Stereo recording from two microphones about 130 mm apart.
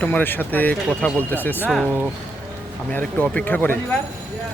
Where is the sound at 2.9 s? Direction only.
10° left (ahead or behind).